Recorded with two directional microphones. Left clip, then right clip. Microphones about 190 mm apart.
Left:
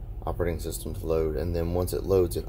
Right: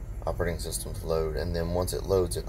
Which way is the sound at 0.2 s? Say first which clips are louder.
Left 1 dB; 50° left (ahead or behind).